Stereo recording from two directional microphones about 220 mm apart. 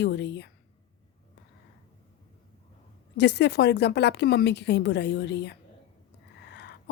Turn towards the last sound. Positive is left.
turn(degrees=50)  # may be behind; listen again after turning